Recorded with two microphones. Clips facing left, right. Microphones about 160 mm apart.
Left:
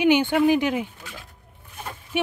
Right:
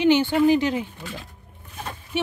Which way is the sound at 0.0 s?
15° left (ahead or behind).